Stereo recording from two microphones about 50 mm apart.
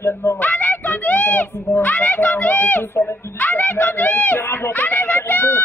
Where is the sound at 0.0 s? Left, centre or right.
Left.